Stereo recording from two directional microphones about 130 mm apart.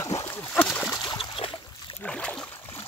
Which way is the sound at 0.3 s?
10° left (ahead or behind).